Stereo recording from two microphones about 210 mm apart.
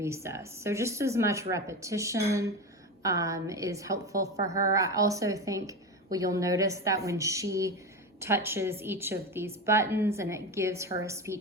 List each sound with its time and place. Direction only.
0.0 s a woman's voice: 15° right (ahead or behind)